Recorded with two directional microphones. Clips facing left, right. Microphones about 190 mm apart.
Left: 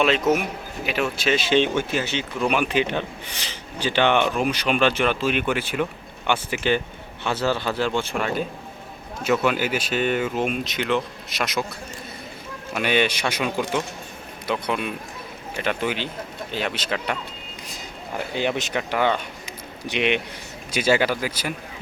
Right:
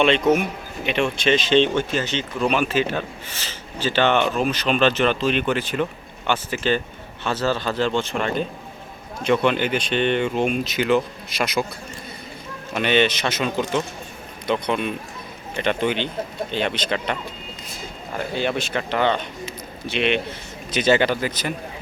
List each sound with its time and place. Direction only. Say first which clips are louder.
0.0 s speech: right 2 dB; 5° left (ahead or behind)
12.7 s speech: right 3 dB; 10° left (ahead or behind)